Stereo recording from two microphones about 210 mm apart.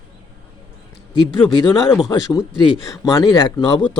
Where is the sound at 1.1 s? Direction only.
20° left (ahead or behind).